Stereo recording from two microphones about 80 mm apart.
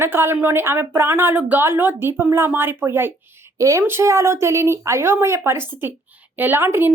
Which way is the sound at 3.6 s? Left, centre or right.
Right.